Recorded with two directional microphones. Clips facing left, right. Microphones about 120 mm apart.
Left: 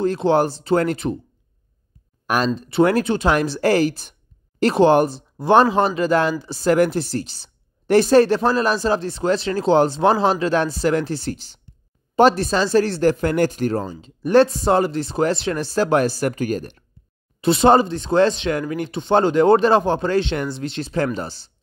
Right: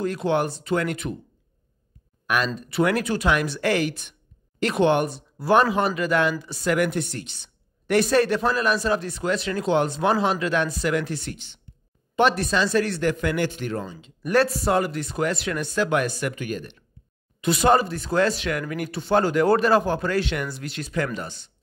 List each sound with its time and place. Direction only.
0.0 s speech: 30° left (ahead or behind)
2.2 s speech: 35° left (ahead or behind)
17.4 s speech: 30° left (ahead or behind)